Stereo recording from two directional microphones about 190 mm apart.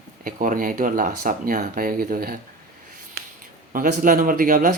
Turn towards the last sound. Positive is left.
turn(degrees=-50)  # may be behind; listen again after turning